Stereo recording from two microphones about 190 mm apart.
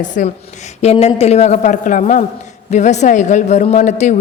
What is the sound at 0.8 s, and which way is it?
A woman's voice, 35° left (ahead or behind).